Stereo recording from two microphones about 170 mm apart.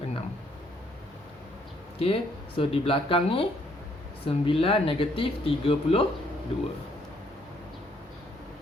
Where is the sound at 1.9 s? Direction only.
35° left (ahead or behind).